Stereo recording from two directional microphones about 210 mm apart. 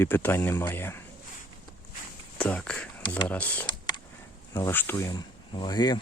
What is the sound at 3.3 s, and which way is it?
Speech, 5° left (ahead or behind).